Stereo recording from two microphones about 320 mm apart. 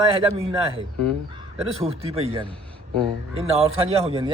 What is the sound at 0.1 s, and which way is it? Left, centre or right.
A man's voice, centre.